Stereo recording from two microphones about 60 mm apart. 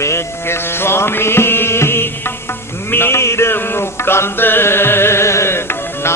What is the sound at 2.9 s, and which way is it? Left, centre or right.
Mantra, left.